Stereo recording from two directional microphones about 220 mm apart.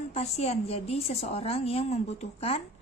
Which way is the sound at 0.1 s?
30° left (ahead or behind).